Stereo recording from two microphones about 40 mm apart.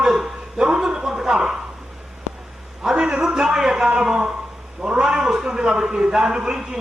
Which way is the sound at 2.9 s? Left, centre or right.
Centre.